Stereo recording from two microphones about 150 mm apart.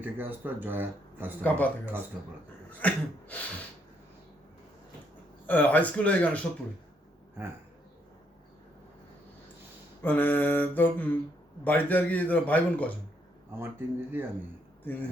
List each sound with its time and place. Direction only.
0.0 s speech: 15° right (ahead or behind)
1.4 s a man's voice: 10° left (ahead or behind)
5.5 s a man's voice: 10° left (ahead or behind)
10.0 s a man's voice: 10° left (ahead or behind)
13.5 s speech: 15° right (ahead or behind)